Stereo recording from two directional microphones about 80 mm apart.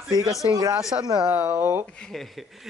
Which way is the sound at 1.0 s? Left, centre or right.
Right.